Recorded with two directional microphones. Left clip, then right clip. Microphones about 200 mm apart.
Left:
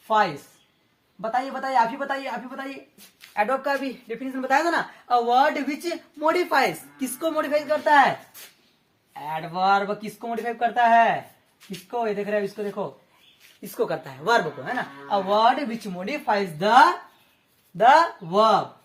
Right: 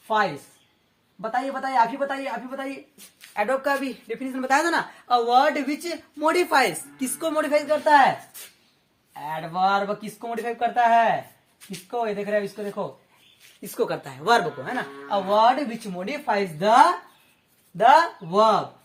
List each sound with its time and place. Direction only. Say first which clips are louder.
0.1 s speech: left 2 dB; centre (ahead or behind)
3.3 s a woman's voice: even; 25° right (ahead or behind)
9.1 s speech: right 1 dB; 15° right (ahead or behind)
13.6 s a woman's voice: even; 30° right (ahead or behind)
15.0 s speech: right 1 dB; 15° right (ahead or behind)